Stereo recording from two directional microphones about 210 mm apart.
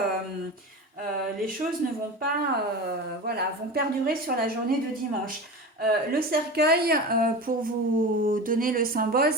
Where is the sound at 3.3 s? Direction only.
50° right (ahead or behind).